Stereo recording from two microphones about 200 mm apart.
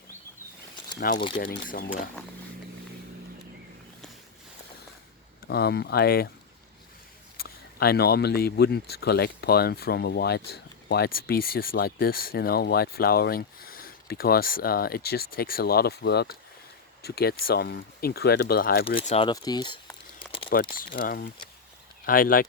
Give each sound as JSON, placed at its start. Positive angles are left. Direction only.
{"t": 0.9, "sound": "speech", "side_deg": 45}
{"t": 5.5, "sound": "speech", "side_deg": 55}
{"t": 7.3, "sound": "speech", "side_deg": 50}
{"t": 18.9, "sound": "speech", "side_deg": 30}
{"t": 19.3, "sound": "crumpling", "side_deg": 20}
{"t": 20.7, "sound": "speech", "side_deg": 45}